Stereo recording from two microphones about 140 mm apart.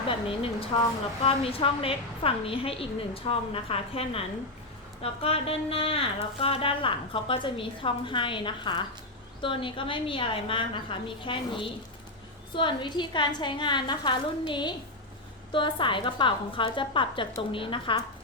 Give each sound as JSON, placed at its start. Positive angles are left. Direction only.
{"t": 0.1, "sound": "a woman's voice", "side_deg": 40}
{"t": 5.2, "sound": "a woman's voice", "side_deg": 45}